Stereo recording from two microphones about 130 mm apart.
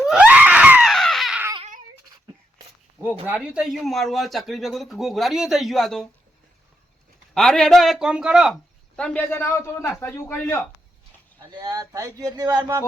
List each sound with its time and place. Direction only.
0.0 s screaming: 5° right (ahead or behind)
3.2 s speech: 10° right (ahead or behind)
7.3 s speech: 5° left (ahead or behind)
9.0 s a man's voice: 10° left (ahead or behind)
9.3 s a man's voice: 20° left (ahead or behind)
11.3 s speech: 30° right (ahead or behind)